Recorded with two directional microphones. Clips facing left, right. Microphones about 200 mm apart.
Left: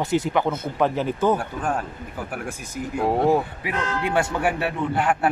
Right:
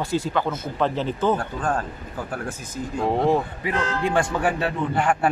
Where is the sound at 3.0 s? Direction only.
10° left (ahead or behind).